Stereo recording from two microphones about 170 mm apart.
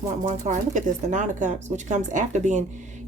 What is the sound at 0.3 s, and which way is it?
A woman's voice, 45° right (ahead or behind).